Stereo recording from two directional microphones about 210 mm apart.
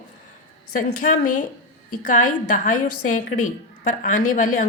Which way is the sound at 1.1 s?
40° left (ahead or behind).